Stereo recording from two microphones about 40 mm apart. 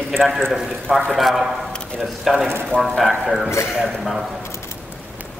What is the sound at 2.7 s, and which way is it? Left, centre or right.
Speech, left.